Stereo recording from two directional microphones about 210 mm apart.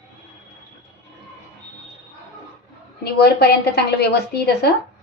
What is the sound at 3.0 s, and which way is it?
A woman's voice, 50° left (ahead or behind).